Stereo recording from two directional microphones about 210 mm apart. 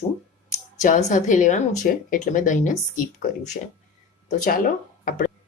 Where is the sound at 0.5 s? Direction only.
35° left (ahead or behind).